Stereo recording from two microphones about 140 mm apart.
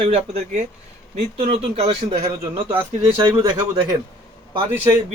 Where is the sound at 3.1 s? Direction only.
30° right (ahead or behind).